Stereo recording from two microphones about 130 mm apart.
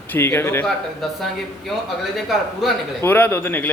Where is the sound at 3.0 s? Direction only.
15° left (ahead or behind).